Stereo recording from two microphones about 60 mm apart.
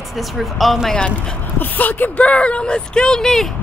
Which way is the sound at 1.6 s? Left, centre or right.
Left.